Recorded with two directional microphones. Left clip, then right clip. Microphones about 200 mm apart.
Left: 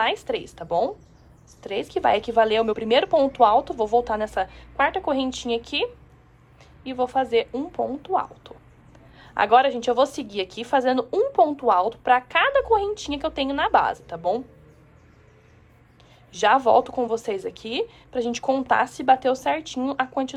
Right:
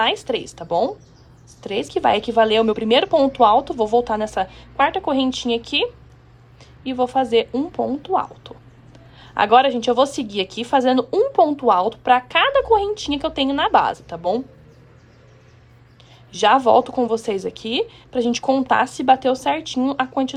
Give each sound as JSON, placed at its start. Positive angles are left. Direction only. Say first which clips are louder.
{"t": 0.0, "sound": "a woman's voice", "louder": "right 4 dB", "side_deg": -5}
{"t": 16.3, "sound": "a woman's voice", "louder": "right 3 dB", "side_deg": -5}